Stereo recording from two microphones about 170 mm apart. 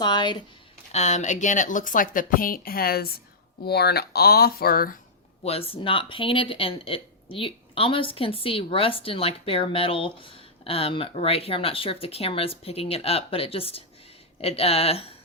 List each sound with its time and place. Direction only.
0.0 s speech: 25° left (ahead or behind)
0.9 s a woman's voice: 45° left (ahead or behind); by 4.9 s 60° left (ahead or behind)
5.4 s speech: 35° left (ahead or behind)